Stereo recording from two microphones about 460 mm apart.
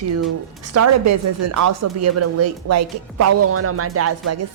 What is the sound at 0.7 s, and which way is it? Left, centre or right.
Speech, right.